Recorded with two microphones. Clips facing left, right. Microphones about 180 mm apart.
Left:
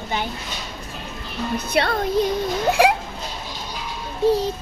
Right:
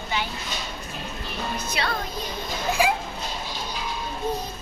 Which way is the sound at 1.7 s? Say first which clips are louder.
Left 9 dB; 60° left (ahead or behind).